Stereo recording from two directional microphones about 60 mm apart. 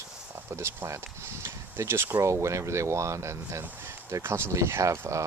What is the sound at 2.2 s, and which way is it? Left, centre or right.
Speech, right.